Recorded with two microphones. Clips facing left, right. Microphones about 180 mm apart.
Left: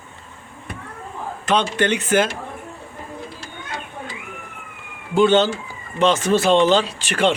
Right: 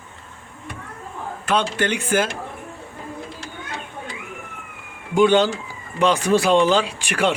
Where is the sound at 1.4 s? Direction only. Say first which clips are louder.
Left 2 dB; 10° right (ahead or behind).